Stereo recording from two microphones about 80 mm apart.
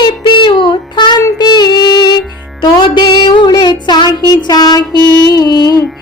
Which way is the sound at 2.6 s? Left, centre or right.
Left.